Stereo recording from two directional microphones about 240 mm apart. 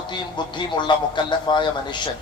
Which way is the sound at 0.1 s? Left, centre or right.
Centre.